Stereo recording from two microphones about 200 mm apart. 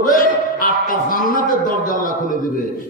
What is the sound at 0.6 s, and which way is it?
Speech, 45° left (ahead or behind).